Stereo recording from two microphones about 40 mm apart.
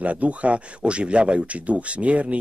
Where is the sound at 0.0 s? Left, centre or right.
Right.